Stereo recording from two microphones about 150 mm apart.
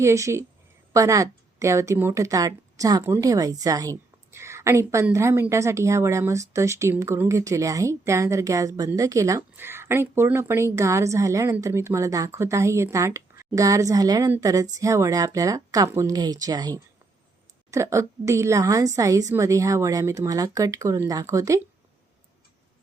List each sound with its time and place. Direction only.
0.0 s a woman's voice: 20° right (ahead or behind)